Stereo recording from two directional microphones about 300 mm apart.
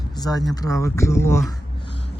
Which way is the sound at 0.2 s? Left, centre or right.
Centre.